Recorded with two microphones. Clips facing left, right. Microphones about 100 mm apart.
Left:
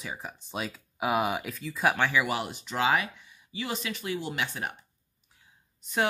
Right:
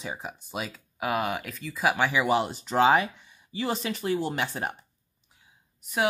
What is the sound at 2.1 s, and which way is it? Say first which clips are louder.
Speech: right 4 dB; 25° right (ahead or behind).